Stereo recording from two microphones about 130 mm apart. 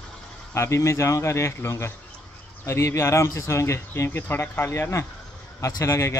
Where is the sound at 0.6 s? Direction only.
20° left (ahead or behind).